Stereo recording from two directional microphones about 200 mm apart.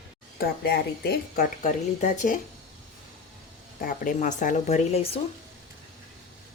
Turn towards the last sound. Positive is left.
turn(degrees=30)  # may be behind; listen again after turning